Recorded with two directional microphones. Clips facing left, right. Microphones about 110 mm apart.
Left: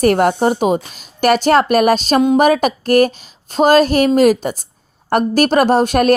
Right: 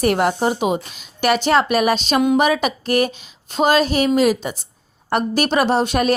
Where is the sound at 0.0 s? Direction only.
45° left (ahead or behind).